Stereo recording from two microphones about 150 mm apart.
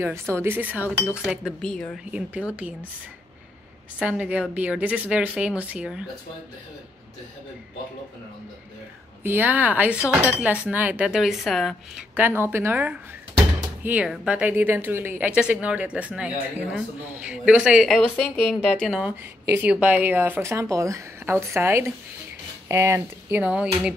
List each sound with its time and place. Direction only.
0.0 s a woman's voice: 15° right (ahead or behind); by 2.0 s 5° left (ahead or behind)
2.0 s a woman's voice: 10° right (ahead or behind)
4.0 s a woman's voice: 10° right (ahead or behind)
9.2 s a woman's voice: 10° right (ahead or behind)
12.2 s a woman's voice: 15° right (ahead or behind)